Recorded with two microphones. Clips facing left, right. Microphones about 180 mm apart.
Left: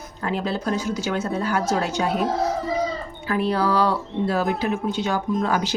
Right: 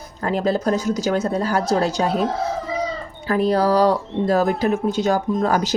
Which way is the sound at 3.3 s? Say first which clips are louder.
Right 4 dB; 40° right (ahead or behind).